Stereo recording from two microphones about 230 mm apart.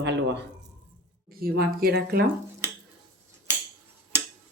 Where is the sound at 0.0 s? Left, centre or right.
Right.